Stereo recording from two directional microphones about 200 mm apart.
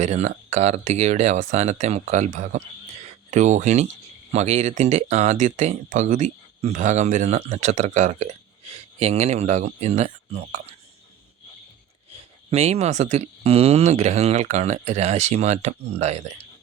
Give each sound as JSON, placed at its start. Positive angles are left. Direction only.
{"t": 0.0, "sound": "speech", "side_deg": -35}
{"t": 12.5, "sound": "speech", "side_deg": -30}